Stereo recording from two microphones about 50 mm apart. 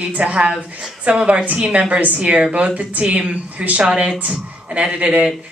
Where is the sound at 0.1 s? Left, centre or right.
Right.